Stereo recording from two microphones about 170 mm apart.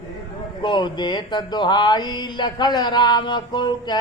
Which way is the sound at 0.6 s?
25° left (ahead or behind).